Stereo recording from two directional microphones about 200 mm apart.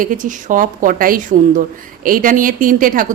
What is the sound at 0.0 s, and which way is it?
A woman's voice, 40° right (ahead or behind).